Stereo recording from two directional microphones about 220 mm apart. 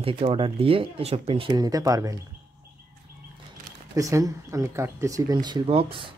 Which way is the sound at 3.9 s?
15° right (ahead or behind).